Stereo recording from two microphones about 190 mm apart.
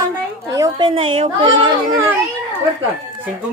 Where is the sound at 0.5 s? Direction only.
20° right (ahead or behind).